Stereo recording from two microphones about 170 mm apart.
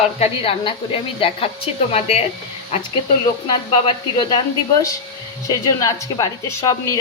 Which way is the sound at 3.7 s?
25° left (ahead or behind).